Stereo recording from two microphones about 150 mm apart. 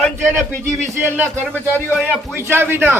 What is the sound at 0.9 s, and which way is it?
A man's voice, 15° right (ahead or behind).